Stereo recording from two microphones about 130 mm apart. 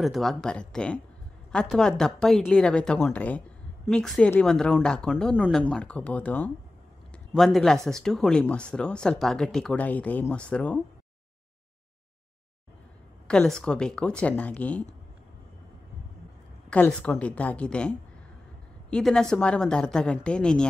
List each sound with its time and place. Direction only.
0.0 s a woman's voice: centre (ahead or behind)
13.3 s speech: 5° left (ahead or behind)
16.7 s a woman's voice: 15° left (ahead or behind)